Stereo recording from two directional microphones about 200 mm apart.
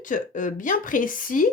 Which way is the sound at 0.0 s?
40° left (ahead or behind).